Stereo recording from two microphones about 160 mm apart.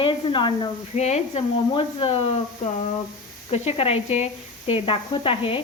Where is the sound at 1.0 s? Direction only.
45° left (ahead or behind).